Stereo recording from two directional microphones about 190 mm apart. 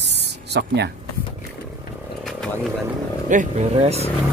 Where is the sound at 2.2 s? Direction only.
5° left (ahead or behind).